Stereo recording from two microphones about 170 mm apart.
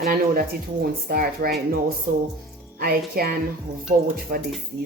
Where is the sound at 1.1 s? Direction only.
60° right (ahead or behind).